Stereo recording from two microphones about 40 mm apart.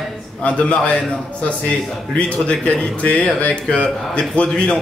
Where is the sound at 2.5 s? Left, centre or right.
Left.